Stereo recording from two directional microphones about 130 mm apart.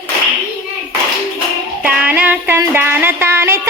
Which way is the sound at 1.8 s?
10° right (ahead or behind).